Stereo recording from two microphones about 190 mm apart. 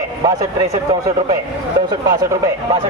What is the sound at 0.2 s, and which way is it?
Speech, 20° right (ahead or behind).